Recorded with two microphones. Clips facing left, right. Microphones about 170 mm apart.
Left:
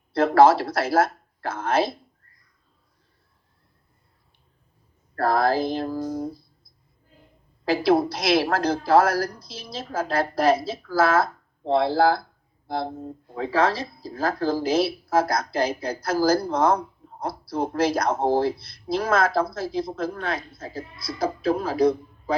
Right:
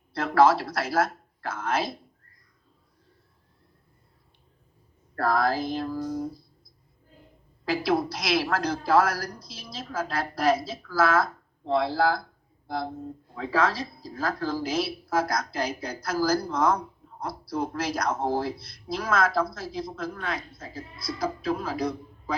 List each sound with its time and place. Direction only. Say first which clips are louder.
0.1 s speech: left 4 dB; 30° left (ahead or behind)
5.2 s speech: left 4 dB; 30° left (ahead or behind)
7.6 s speech: left 5 dB; 30° left (ahead or behind)